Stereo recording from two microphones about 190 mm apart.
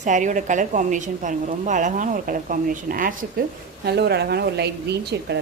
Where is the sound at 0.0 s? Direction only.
40° right (ahead or behind).